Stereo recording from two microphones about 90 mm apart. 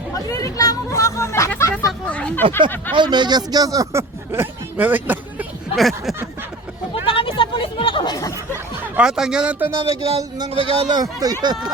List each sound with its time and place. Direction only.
0.3 s chatter: 40° left (ahead or behind)
2.0 s speech: 15° left (ahead or behind)
2.9 s speech: 55° right (ahead or behind); by 4.0 s 40° right (ahead or behind)
4.3 s speech: 20° right (ahead or behind)
6.9 s chatter: 85° left
8.0 s a sound: 40° left (ahead or behind)
9.0 s speech: 5° right (ahead or behind)
9.7 s speech: 90° right
10.8 s speech: 45° right (ahead or behind)